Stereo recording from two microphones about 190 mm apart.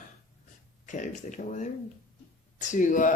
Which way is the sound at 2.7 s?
40° left (ahead or behind).